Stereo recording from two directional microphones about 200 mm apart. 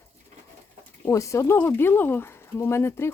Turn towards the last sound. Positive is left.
turn(degrees=10)  # may be behind; listen again after turning